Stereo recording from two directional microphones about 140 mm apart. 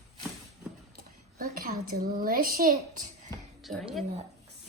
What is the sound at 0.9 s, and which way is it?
A woman's voice, 85° right.